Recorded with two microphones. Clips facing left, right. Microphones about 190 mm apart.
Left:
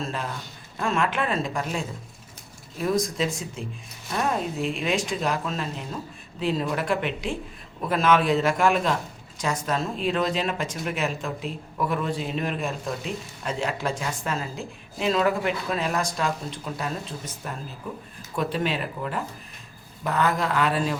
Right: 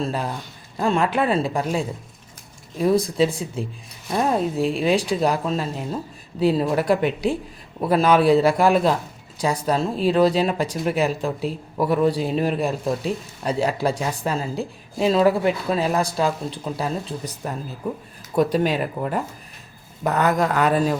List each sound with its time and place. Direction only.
0.0 s speech: 35° right (ahead or behind)